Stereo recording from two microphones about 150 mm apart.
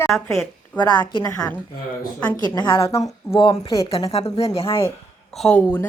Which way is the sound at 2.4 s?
30° left (ahead or behind).